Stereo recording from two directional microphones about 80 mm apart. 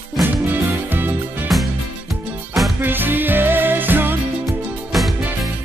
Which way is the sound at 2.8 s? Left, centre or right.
Right.